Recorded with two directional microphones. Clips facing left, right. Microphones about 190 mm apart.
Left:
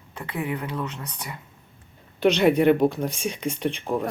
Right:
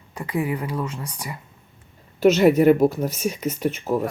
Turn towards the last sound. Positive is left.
turn(degrees=-5)  # may be behind; listen again after turning